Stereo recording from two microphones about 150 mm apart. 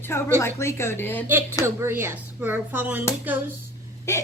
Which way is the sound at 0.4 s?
20° left (ahead or behind).